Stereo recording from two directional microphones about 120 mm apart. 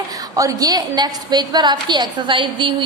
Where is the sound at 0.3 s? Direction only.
30° right (ahead or behind).